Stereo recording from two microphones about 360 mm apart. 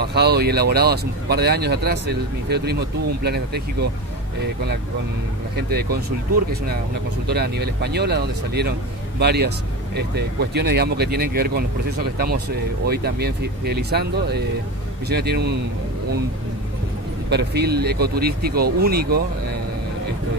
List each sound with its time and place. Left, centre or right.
0.0 s speech: right
5.6 s speech: right
7.2 s speech: right
17.3 s speech: right